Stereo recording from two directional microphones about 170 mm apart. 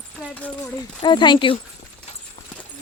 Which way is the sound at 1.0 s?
25° left (ahead or behind).